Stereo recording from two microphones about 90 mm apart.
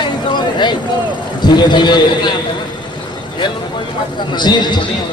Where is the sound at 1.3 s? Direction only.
55° left (ahead or behind).